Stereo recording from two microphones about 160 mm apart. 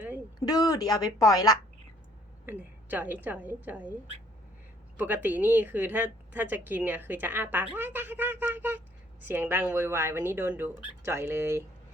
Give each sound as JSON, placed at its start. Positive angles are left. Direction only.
{"t": 0.3, "sound": "a woman's voice", "side_deg": 25}
{"t": 2.5, "sound": "speech", "side_deg": -10}
{"t": 4.9, "sound": "speech", "side_deg": -10}